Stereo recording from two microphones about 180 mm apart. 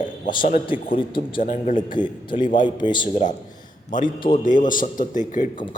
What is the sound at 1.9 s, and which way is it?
A man's voice, 25° left (ahead or behind).